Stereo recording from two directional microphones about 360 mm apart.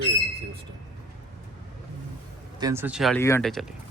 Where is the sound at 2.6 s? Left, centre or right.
Centre.